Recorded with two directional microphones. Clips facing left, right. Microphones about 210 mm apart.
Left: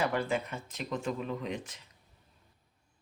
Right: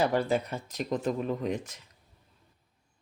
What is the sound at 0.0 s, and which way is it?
Speech, 35° right (ahead or behind).